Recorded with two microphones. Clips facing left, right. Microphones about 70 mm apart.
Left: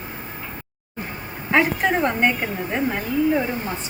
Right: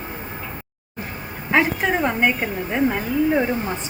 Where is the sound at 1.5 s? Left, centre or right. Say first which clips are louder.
Even; centre.